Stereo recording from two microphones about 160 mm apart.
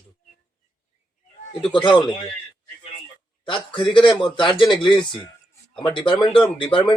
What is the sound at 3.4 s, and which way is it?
A man's voice, 30° left (ahead or behind).